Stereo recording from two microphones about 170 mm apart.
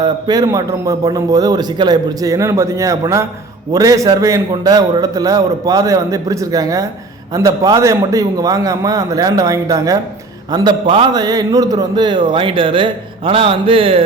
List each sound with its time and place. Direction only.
0.0 s a man's voice: 25° right (ahead or behind)